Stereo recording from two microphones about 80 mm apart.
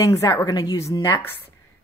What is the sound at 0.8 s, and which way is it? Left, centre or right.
Speech, left.